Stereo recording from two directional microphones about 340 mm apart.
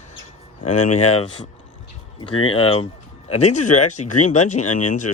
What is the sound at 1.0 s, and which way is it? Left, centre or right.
Speech, centre.